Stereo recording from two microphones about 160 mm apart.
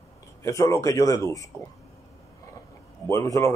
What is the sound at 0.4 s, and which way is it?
Speech, 20° left (ahead or behind).